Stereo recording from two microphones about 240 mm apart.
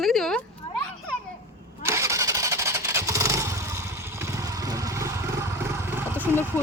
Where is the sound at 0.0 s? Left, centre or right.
Centre.